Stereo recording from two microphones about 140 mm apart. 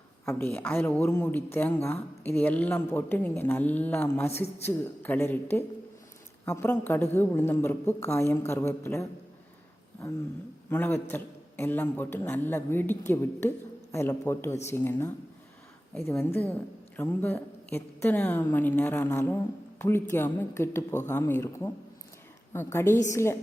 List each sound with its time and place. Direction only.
0.3 s speech: 15° left (ahead or behind)
10.7 s a man's voice: 15° left (ahead or behind)